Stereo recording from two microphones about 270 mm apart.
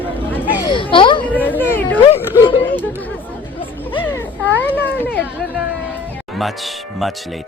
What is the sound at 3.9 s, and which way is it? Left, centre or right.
Music, centre.